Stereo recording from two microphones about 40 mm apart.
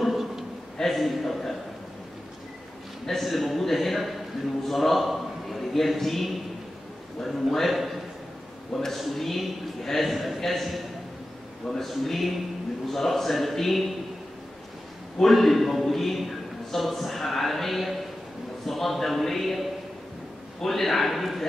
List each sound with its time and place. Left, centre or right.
0.0 s a sound: centre
0.7 s a man's voice: centre
3.1 s a man's voice: centre
15.1 s a man's voice: centre
20.6 s a man's voice: centre